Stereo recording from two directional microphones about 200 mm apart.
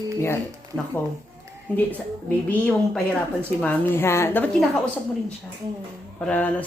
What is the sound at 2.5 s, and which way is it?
A woman's voice, 5° left (ahead or behind).